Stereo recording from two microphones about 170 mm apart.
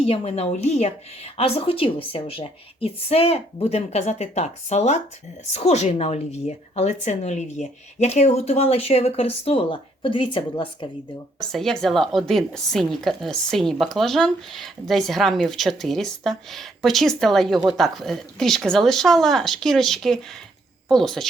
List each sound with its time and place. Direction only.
0.0 s a woman's voice: 35° left (ahead or behind)
11.5 s a woman's voice: centre (ahead or behind)